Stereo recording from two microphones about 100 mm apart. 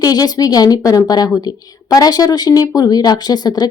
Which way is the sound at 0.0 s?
40° left (ahead or behind).